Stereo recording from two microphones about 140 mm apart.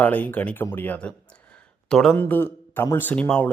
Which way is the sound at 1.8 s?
Centre (ahead or behind).